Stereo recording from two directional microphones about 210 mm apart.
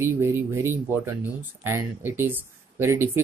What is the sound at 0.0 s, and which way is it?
Speech, 10° right (ahead or behind).